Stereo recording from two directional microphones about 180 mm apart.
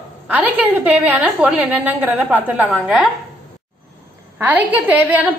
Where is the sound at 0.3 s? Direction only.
10° right (ahead or behind).